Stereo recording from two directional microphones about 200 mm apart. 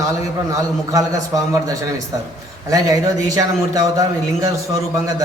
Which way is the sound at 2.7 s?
15° right (ahead or behind).